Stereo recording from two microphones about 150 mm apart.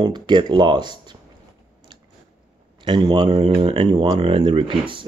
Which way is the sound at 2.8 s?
30° right (ahead or behind).